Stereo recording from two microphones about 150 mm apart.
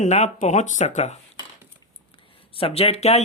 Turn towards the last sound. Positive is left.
turn(degrees=45)  # may be behind; listen again after turning